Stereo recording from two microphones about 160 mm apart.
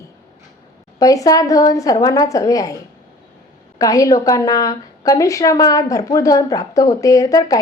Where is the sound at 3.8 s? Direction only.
20° left (ahead or behind).